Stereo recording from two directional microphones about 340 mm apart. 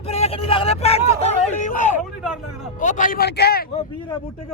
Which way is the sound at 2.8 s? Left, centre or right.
Left.